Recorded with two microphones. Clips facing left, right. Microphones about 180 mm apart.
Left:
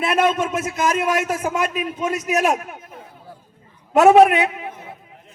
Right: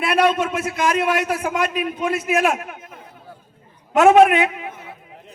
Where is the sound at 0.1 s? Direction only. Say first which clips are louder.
Right 2 dB; 45° left (ahead or behind).